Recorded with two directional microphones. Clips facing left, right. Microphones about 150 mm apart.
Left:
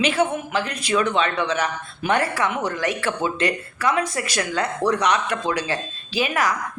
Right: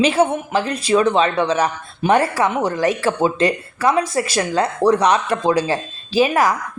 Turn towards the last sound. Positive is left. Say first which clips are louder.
# right 7 dB
turn(degrees=-35)  # may be behind; listen again after turning